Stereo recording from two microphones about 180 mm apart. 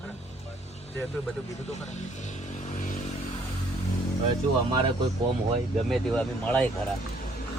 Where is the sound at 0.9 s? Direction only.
10° left (ahead or behind).